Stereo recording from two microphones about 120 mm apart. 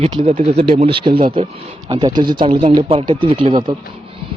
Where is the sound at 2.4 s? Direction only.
55° right (ahead or behind).